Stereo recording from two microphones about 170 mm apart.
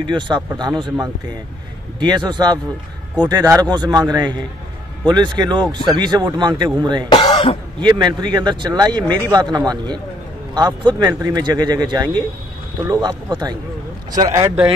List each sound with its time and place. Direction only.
0.0 s speech: 25° right (ahead or behind)
7.1 s throat clearing: 25° left (ahead or behind)
7.8 s speech: 25° right (ahead or behind)